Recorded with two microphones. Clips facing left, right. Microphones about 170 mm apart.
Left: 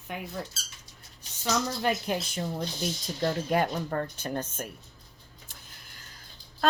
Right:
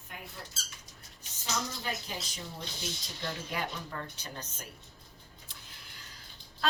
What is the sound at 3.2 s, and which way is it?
Speech, 50° left (ahead or behind).